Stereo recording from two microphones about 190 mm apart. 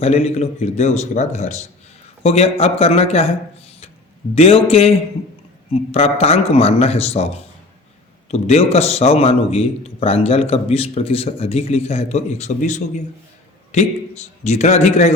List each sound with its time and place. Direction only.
0.0 s a man's voice: 35° left (ahead or behind)
4.4 s a man's voice: 30° left (ahead or behind)